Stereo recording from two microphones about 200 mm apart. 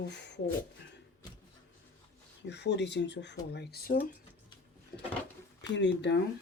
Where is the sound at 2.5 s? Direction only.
60° left (ahead or behind).